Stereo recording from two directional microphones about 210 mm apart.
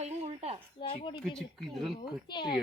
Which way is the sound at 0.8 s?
25° left (ahead or behind).